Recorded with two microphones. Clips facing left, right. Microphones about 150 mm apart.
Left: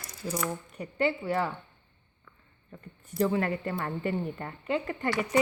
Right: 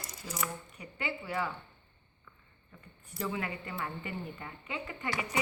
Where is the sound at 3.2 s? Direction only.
45° left (ahead or behind).